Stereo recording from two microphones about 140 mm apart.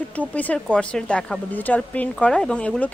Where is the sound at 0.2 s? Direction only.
10° left (ahead or behind).